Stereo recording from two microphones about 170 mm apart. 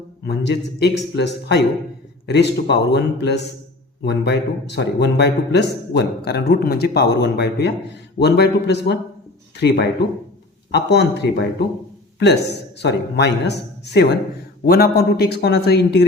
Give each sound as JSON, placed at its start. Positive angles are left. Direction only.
{"t": 0.3, "sound": "a man's voice", "side_deg": 75}
{"t": 14.6, "sound": "a man's voice", "side_deg": 65}